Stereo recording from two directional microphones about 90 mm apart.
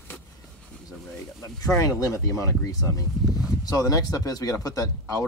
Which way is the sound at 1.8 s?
40° left (ahead or behind).